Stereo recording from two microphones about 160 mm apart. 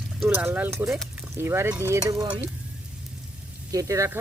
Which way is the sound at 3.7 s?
20° right (ahead or behind).